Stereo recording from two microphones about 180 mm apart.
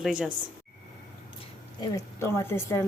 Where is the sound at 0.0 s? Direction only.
Centre (ahead or behind).